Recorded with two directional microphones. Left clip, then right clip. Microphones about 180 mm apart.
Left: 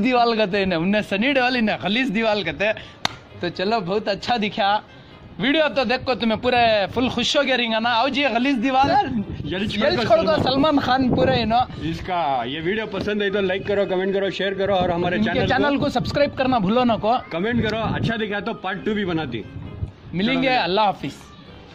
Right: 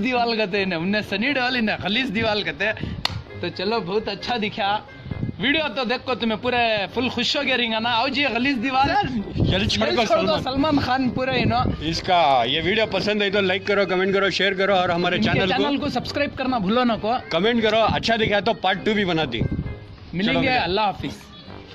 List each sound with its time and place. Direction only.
0.0 s a man's voice: 25° left (ahead or behind)
3.4 s a man's voice: 40° left (ahead or behind)
9.5 s a man's voice: 30° right (ahead or behind)
10.0 s a man's voice: 20° left (ahead or behind)
11.2 s a man's voice: 25° left (ahead or behind)
11.8 s a man's voice: 30° right (ahead or behind)
15.5 s a man's voice: 15° left (ahead or behind)
16.6 s speech: 5° left (ahead or behind)
17.3 s a man's voice: 35° right (ahead or behind)
20.4 s a man's voice: 15° left (ahead or behind)